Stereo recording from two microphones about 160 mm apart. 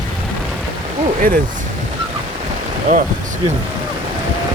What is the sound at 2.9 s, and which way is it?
Speech, 50° right (ahead or behind).